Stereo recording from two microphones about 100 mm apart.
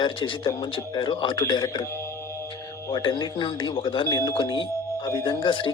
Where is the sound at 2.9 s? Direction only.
50° left (ahead or behind).